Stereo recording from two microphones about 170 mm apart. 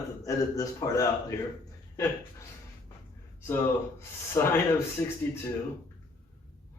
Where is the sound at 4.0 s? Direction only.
15° left (ahead or behind).